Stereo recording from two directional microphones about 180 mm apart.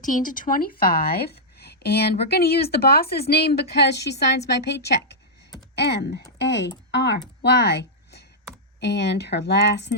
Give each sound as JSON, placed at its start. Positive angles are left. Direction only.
{"t": 0.0, "sound": "speech", "side_deg": 45}
{"t": 7.4, "sound": "a sound", "side_deg": 65}
{"t": 8.8, "sound": "speech", "side_deg": 70}